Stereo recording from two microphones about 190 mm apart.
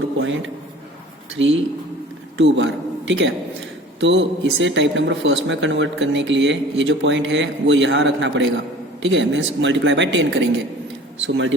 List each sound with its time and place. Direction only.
1.4 s a man's voice: 80° right